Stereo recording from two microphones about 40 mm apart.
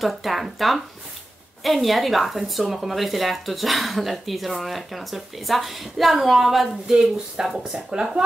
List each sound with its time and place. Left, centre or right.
0.0 s speech: centre